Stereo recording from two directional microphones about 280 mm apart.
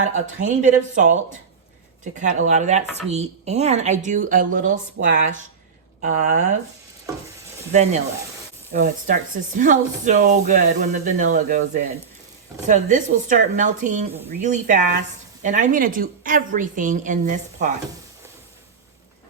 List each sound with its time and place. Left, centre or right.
0.1 s speech: right
2.2 s speech: right
7.7 s speech: right